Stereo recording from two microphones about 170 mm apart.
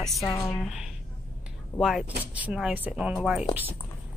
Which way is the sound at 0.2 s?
20° left (ahead or behind).